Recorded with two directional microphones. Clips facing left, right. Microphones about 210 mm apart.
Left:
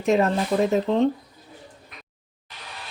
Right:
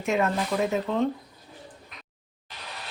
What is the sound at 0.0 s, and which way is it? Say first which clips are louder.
Speech: left 5 dB; 35° left (ahead or behind).